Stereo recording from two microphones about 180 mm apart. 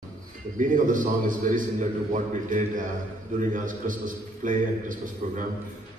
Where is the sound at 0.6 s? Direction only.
45° right (ahead or behind).